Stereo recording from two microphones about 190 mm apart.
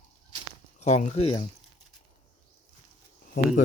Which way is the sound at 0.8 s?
35° left (ahead or behind).